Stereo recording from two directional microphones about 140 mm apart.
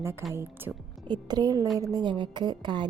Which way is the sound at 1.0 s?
30° right (ahead or behind).